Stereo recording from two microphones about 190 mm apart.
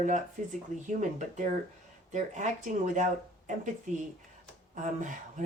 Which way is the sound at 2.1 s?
40° right (ahead or behind).